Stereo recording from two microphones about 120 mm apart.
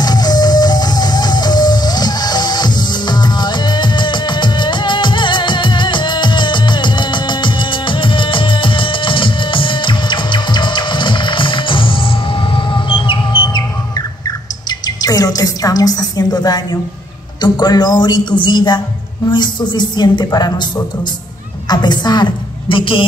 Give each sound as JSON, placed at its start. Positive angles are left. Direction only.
{"t": 0.0, "sound": "music", "side_deg": 35}
{"t": 17.4, "sound": "a woman's voice", "side_deg": 35}